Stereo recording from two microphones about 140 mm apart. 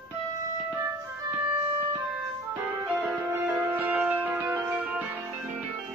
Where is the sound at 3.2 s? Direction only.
20° right (ahead or behind).